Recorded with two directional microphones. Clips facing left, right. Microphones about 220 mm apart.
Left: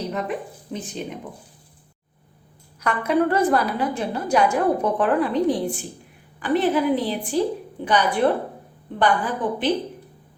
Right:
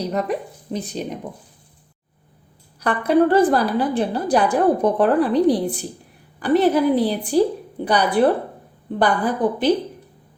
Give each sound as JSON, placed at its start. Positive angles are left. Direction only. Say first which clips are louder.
{"t": 0.1, "sound": "a woman's voice", "louder": "right 4 dB", "side_deg": -40}
{"t": 2.8, "sound": "a woman's voice", "louder": "right 4 dB", "side_deg": -35}